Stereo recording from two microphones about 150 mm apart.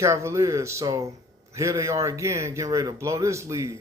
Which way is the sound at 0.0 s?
20° right (ahead or behind).